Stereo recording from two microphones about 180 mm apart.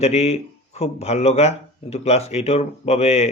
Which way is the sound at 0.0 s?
35° left (ahead or behind).